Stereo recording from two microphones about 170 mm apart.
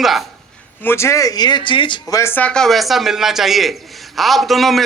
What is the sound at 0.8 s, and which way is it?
Speech, 15° left (ahead or behind).